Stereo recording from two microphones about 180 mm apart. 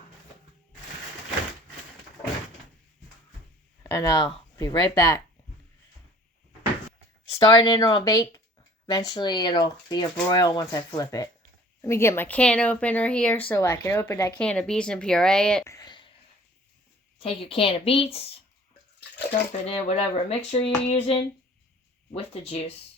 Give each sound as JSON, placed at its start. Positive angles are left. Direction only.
{"t": 3.8, "sound": "speech", "side_deg": 15}
{"t": 7.3, "sound": "speech", "side_deg": 20}
{"t": 10.2, "sound": "speech", "side_deg": 15}
{"t": 14.3, "sound": "speech", "side_deg": 5}
{"t": 15.6, "sound": "a sound", "side_deg": 20}
{"t": 17.2, "sound": "speech", "side_deg": 30}
{"t": 19.3, "sound": "speech", "side_deg": 35}